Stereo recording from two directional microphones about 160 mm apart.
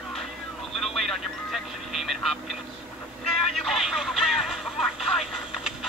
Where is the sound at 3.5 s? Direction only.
Centre (ahead or behind).